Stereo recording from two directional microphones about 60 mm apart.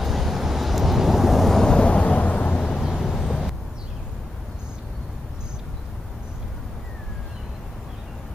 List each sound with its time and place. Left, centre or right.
0.0 s vehicle: centre
2.8 s vehicle: centre